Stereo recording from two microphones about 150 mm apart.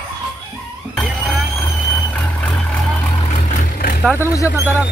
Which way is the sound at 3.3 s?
55° left (ahead or behind).